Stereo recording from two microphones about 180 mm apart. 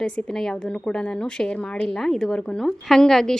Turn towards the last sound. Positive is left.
turn(degrees=5)  # may be behind; listen again after turning